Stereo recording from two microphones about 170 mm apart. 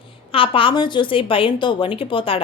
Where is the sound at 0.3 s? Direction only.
30° left (ahead or behind).